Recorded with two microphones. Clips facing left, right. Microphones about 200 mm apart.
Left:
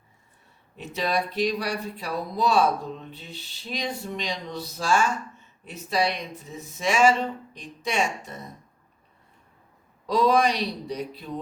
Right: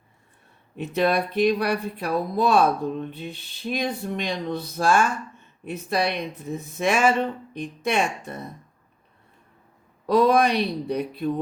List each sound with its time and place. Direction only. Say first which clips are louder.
0.8 s speech: right 5 dB; 55° right (ahead or behind)
10.1 s speech: right 3 dB; 55° right (ahead or behind)